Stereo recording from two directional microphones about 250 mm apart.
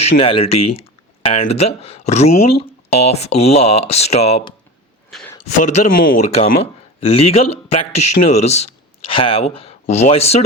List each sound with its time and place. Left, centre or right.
0.2 s speech: left
5.1 s a sound: centre
5.5 s speech: left